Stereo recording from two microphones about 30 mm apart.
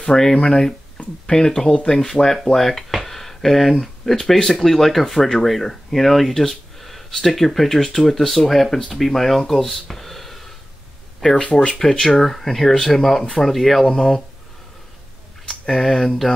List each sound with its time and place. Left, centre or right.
0.1 s speech: left
3.1 s a sound: centre
3.8 s speech: centre
11.8 s speech: centre
15.6 s speech: centre